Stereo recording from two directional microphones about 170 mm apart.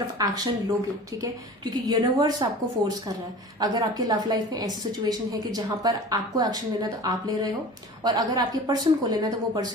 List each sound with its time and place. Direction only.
0.0 s a woman's voice: 25° right (ahead or behind)